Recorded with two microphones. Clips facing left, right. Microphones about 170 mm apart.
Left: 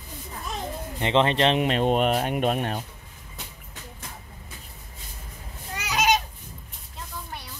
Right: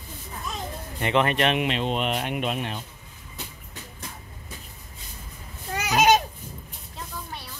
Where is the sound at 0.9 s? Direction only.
25° left (ahead or behind).